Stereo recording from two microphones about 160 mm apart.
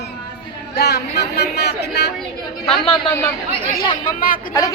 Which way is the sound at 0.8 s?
90° left.